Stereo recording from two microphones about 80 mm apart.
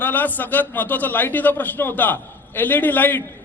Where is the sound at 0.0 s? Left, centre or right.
Left.